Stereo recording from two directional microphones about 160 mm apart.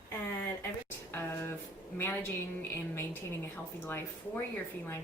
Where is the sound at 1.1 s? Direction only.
15° left (ahead or behind).